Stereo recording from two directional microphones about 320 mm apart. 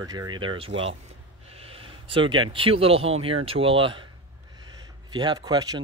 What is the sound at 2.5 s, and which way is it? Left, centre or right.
Speech, centre.